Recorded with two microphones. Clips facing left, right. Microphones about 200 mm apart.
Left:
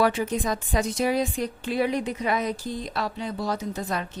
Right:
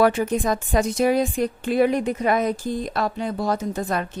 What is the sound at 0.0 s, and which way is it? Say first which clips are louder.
A woman's voice: right 4 dB; 50° right (ahead or behind).